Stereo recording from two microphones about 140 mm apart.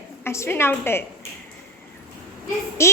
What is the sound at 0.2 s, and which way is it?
Speech, 20° left (ahead or behind).